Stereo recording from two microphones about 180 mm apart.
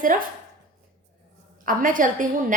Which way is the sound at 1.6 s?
50° right (ahead or behind).